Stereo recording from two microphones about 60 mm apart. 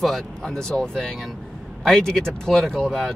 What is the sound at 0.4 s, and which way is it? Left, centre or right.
Speech, centre.